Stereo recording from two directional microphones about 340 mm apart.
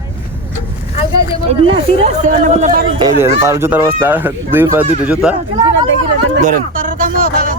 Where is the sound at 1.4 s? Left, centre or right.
Centre.